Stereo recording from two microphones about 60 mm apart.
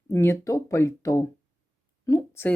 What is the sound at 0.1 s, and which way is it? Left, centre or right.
Speech, left.